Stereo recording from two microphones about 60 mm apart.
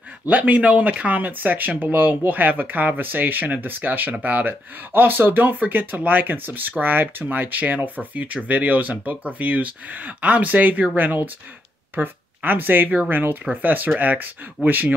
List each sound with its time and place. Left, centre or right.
0.3 s speech: right